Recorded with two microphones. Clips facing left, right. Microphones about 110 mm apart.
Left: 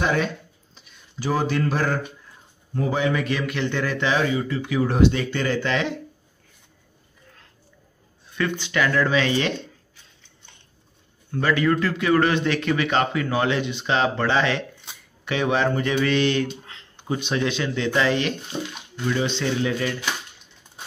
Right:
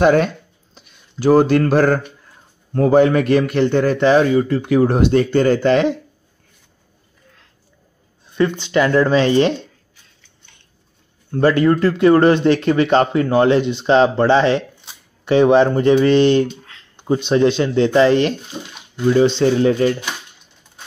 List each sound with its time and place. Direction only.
0.0 s speech: 55° right (ahead or behind)
8.4 s speech: 30° right (ahead or behind)
11.3 s speech: 35° right (ahead or behind)